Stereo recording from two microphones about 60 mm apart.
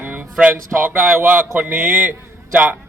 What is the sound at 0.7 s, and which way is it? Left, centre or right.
A man's voice, right.